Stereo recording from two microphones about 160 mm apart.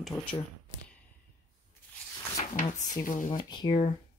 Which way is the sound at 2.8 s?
50° left (ahead or behind).